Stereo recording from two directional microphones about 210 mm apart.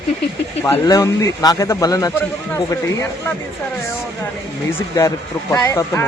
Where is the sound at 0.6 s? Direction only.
10° left (ahead or behind).